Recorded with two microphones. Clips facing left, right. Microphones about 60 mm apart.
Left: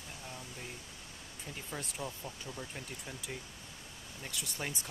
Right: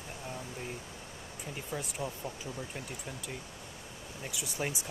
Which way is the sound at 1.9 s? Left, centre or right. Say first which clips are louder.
Right 4 dB; centre.